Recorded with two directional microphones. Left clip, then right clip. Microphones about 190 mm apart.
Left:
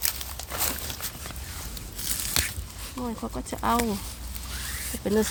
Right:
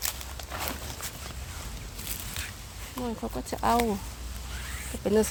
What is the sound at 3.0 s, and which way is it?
Speech, 5° right (ahead or behind).